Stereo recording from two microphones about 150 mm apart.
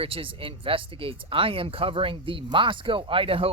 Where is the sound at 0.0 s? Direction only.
35° right (ahead or behind).